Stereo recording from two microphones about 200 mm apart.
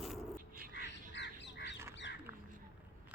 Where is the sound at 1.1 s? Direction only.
60° left (ahead or behind).